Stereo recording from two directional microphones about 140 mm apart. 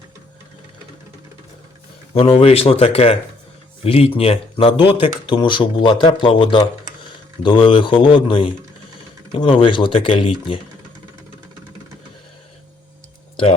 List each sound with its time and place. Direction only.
2.1 s speech: 40° left (ahead or behind)